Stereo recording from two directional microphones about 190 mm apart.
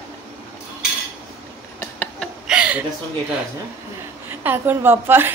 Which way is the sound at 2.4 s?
5° right (ahead or behind).